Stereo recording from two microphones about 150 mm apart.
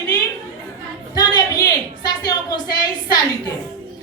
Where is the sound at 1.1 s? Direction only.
25° left (ahead or behind).